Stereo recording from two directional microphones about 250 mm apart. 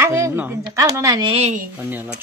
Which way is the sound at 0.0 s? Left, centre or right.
Centre.